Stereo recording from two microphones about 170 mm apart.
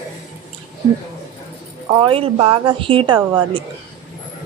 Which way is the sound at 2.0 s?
30° right (ahead or behind).